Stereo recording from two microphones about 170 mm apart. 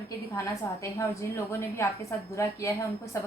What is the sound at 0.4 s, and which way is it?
A woman's voice, 15° left (ahead or behind).